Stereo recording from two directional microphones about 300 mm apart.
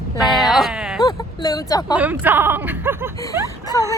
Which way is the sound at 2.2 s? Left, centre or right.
Centre.